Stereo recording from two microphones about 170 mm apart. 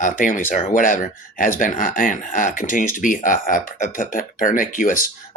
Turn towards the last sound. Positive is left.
turn(degrees=50)  # may be behind; listen again after turning